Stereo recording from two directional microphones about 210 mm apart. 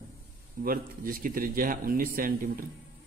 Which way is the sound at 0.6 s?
40° right (ahead or behind).